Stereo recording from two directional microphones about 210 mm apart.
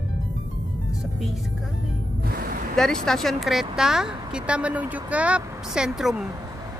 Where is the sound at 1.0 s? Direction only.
Centre (ahead or behind).